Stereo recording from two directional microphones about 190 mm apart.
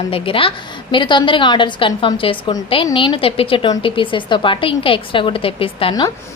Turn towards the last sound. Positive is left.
turn(degrees=30)  # may be behind; listen again after turning